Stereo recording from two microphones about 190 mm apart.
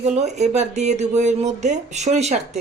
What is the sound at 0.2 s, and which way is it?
Speech, 35° right (ahead or behind).